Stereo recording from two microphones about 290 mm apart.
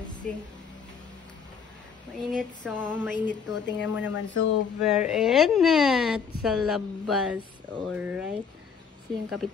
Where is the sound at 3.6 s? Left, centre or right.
Left.